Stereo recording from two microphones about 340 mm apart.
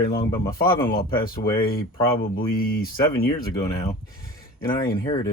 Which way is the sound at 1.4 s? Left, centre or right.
Centre.